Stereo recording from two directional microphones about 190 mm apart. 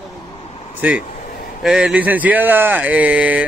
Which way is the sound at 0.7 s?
10° right (ahead or behind).